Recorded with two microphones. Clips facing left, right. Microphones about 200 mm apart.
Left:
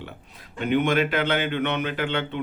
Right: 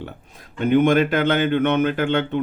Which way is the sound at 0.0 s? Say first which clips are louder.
Right 5 dB; 45° right (ahead or behind).